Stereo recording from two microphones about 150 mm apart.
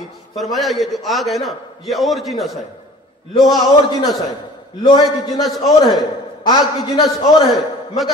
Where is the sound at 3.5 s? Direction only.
25° left (ahead or behind).